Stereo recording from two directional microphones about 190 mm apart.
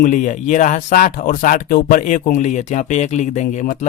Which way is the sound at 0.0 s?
40° left (ahead or behind).